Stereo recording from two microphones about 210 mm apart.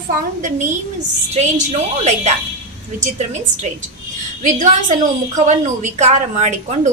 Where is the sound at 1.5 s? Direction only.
30° right (ahead or behind).